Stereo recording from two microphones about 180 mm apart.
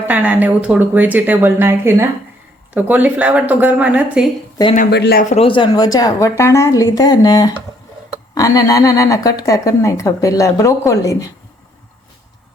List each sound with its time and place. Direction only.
0.1 s speech: 10° right (ahead or behind)
4.7 s speech: 45° left (ahead or behind)
4.9 s a man's voice: 65° left (ahead or behind)
5.3 s a woman's voice: 30° left (ahead or behind)